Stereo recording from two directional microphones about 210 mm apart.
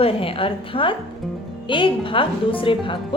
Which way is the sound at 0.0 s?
25° left (ahead or behind).